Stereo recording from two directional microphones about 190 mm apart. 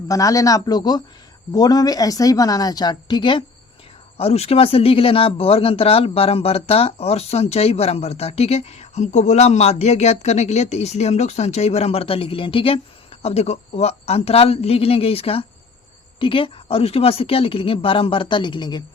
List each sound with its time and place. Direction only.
0.1 s a woman's voice: 15° left (ahead or behind)